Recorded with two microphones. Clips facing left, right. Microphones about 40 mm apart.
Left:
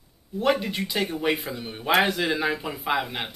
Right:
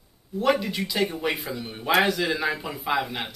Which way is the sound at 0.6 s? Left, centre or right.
Centre.